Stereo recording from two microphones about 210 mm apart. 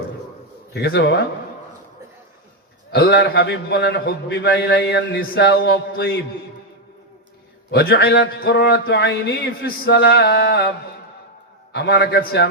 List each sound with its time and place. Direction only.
0.7 s a man's voice: 50° left (ahead or behind)
2.9 s a man's voice: 50° left (ahead or behind)
7.7 s a man's voice: 55° left (ahead or behind)
11.7 s a man's voice: 55° left (ahead or behind)